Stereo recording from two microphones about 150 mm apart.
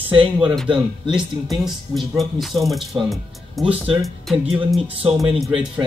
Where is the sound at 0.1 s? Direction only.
35° right (ahead or behind).